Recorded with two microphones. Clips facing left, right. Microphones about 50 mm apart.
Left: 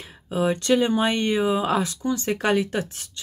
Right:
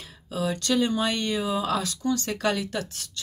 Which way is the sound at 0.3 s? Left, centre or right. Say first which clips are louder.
Left 5 dB; left.